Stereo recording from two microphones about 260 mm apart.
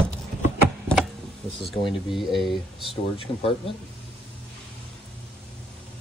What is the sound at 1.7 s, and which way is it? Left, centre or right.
Speech, centre.